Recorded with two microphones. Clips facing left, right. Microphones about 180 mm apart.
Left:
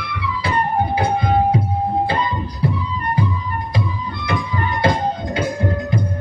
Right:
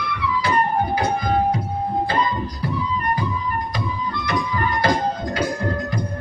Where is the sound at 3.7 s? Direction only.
25° left (ahead or behind).